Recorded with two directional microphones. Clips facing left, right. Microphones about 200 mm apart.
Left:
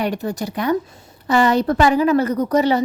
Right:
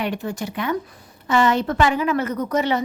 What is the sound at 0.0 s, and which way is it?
A woman's voice, 40° left (ahead or behind).